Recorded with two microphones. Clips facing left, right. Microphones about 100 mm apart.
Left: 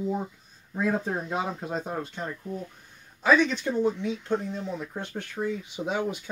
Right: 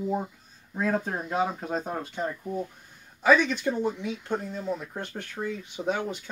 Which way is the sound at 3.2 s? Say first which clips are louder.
Right 1 dB; 5° right (ahead or behind).